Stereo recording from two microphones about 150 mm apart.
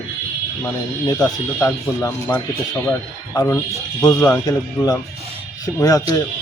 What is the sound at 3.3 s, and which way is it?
A man's voice, 25° left (ahead or behind).